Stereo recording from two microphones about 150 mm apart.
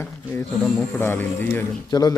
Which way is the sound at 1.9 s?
25° left (ahead or behind).